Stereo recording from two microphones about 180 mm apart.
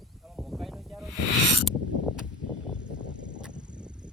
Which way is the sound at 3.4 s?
5° right (ahead or behind).